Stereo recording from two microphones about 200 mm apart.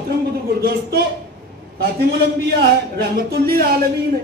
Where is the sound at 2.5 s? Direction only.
50° right (ahead or behind).